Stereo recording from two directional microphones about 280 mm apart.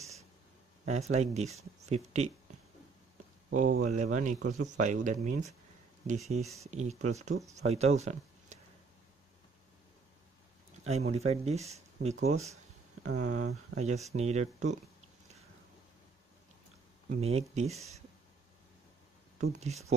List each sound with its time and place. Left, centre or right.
1.1 s speech: right
3.5 s speech: right
10.8 s speech: right
13.0 s speech: right
13.7 s speech: right
17.2 s speech: right
19.4 s speech: right